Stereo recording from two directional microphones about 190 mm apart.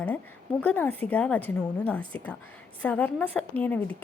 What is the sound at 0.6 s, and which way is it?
A woman's voice, 10° left (ahead or behind).